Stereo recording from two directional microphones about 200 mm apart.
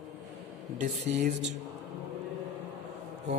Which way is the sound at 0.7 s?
40° right (ahead or behind).